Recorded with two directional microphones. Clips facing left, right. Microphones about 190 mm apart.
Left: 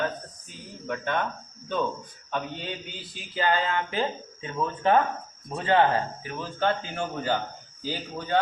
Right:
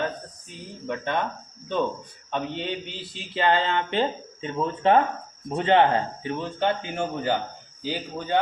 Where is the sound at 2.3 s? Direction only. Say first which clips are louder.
Right 4 dB; 25° right (ahead or behind).